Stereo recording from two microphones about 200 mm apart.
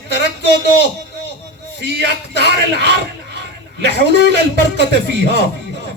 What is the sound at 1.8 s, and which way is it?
A man's voice, 55° right (ahead or behind).